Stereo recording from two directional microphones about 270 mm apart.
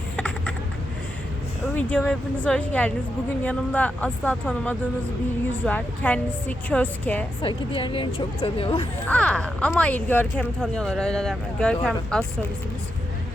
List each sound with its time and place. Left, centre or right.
0.2 s typing: centre
1.7 s speech: centre
7.4 s speech: centre
9.0 s speech: centre